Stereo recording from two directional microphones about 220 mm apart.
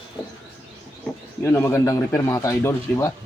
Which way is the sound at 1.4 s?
10° left (ahead or behind).